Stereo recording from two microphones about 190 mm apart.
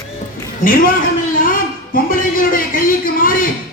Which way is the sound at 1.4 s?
45° left (ahead or behind).